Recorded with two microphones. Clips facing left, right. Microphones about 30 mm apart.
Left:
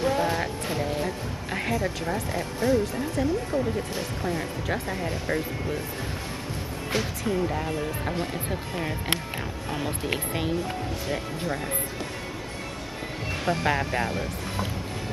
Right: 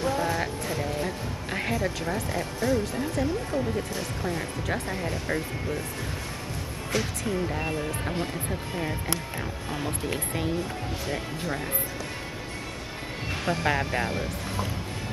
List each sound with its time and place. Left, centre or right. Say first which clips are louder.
0.0 s music: left 2 dB; centre
0.7 s speech: left 3 dB; centre
7.0 s speech: left 2 dB; centre
10.0 s speech: left 2 dB; centre
11.1 s speech: left 1 dB; centre
13.5 s speech: left 1 dB; centre